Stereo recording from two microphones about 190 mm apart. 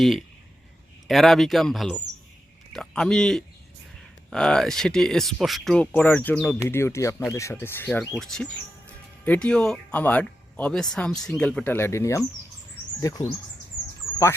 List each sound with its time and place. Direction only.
0.0 s speech: centre (ahead or behind); by 13.2 s 20° left (ahead or behind)